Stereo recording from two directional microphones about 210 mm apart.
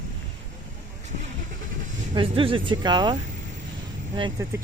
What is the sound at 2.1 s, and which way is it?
Speech, 25° right (ahead or behind).